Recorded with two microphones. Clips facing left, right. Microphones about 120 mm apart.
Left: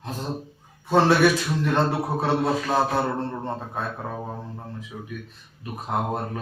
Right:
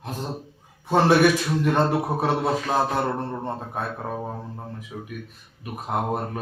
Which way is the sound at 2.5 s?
Centre (ahead or behind).